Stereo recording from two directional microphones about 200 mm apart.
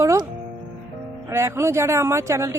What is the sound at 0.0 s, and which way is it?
Music, 15° right (ahead or behind).